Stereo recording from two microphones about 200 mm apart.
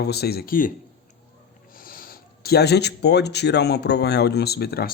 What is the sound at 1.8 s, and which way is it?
Speech, 45° left (ahead or behind).